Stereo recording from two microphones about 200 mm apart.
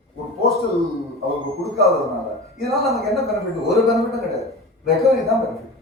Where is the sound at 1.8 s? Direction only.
Centre (ahead or behind).